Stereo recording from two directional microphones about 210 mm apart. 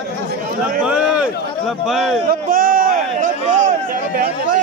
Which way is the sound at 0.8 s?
5° right (ahead or behind).